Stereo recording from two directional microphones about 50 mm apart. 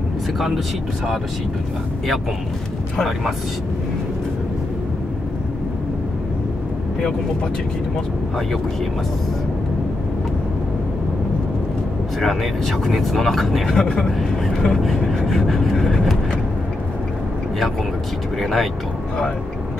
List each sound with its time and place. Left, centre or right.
12.2 s speech: centre
13.7 s speech: centre
18.4 s speech: centre